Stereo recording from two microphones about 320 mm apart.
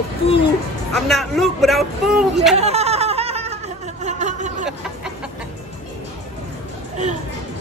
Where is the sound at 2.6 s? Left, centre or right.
Centre.